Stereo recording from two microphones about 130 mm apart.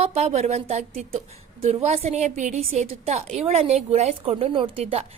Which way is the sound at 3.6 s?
55° right (ahead or behind).